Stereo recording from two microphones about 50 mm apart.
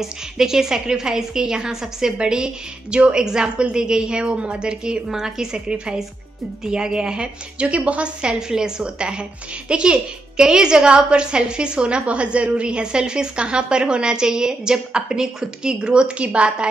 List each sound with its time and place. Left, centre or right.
0.0 s a woman's voice: centre